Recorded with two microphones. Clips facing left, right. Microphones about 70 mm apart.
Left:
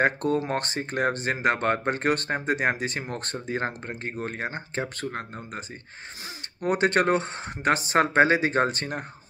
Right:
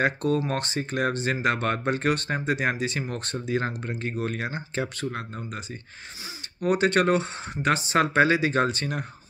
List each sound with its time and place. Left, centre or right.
0.0 s speech: left
6.6 s speech: left